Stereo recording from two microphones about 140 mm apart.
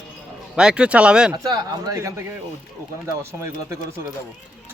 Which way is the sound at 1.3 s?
30° right (ahead or behind).